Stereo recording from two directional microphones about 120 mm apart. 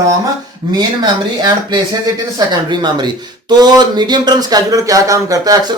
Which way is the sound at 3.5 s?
35° right (ahead or behind).